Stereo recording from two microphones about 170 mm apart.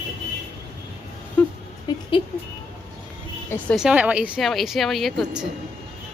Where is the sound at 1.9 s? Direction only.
25° left (ahead or behind).